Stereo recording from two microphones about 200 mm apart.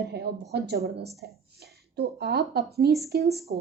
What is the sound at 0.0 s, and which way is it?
A woman's voice, 55° right (ahead or behind).